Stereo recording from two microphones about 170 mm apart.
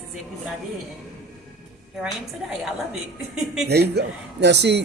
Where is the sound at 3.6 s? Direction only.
75° right (ahead or behind).